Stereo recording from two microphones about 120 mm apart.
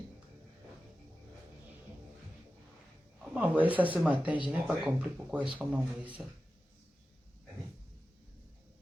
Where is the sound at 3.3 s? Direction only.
15° right (ahead or behind).